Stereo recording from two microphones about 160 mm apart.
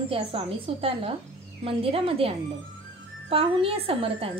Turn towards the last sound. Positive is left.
turn(degrees=-35)  # may be behind; listen again after turning